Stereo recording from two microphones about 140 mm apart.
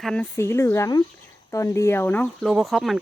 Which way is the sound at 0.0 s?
5° left (ahead or behind).